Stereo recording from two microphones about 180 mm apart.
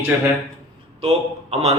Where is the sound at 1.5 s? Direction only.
35° right (ahead or behind).